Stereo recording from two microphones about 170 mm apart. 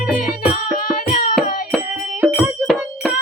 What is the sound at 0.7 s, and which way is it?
Music, 60° left (ahead or behind).